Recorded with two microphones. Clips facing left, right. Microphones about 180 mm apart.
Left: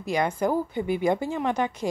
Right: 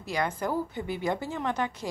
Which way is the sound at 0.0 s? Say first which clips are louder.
Left 5 dB; 15° left (ahead or behind).